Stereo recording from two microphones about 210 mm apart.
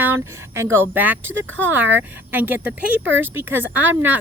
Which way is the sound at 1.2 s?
65° right (ahead or behind).